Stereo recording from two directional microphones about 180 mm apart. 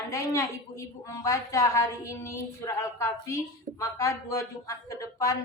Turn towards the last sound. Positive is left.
turn(degrees=20)  # may be behind; listen again after turning